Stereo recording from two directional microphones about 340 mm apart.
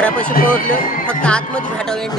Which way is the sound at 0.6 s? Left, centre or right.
Left.